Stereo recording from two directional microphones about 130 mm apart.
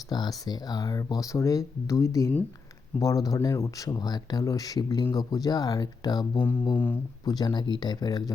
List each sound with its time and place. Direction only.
0.1 s speech: 30° left (ahead or behind)
6.7 s speech: 15° left (ahead or behind)
7.3 s speech: 30° left (ahead or behind)